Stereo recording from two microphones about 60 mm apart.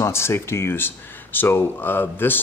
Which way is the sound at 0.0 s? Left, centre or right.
Left.